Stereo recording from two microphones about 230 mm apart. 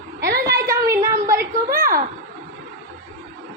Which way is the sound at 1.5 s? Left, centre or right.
Right.